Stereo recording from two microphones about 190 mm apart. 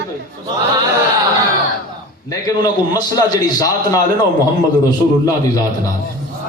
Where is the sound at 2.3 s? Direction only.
20° left (ahead or behind).